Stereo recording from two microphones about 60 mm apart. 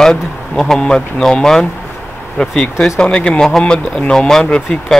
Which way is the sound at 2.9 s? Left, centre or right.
Centre.